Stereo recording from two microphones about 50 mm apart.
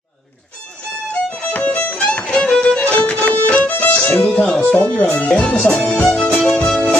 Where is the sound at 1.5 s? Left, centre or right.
Left.